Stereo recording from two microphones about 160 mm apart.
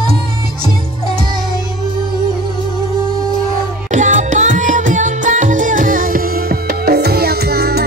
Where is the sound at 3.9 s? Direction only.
50° right (ahead or behind); by 7.8 s 75° right (ahead or behind).